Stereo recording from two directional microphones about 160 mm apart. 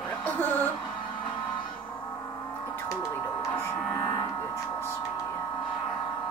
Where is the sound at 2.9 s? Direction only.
20° left (ahead or behind).